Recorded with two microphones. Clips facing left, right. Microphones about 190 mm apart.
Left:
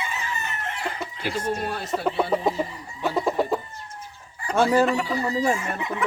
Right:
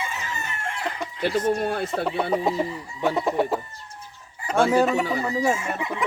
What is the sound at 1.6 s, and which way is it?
Chicken, 55° right (ahead or behind).